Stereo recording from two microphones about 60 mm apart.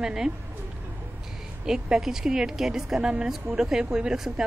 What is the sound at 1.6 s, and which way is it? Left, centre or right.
A woman's voice, centre.